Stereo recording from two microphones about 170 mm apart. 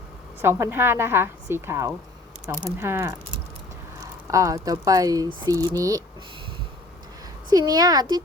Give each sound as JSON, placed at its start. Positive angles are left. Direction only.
{"t": 0.4, "sound": "a woman's voice", "side_deg": -15}
{"t": 7.5, "sound": "speech", "side_deg": -20}